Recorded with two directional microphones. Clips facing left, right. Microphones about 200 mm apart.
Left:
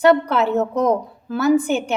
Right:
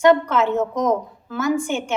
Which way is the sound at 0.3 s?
35° left (ahead or behind).